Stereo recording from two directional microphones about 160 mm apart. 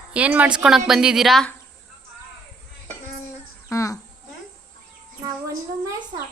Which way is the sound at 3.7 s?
20° left (ahead or behind).